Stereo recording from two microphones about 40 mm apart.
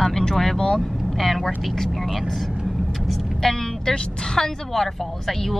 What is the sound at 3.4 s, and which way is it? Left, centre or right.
Speech, centre.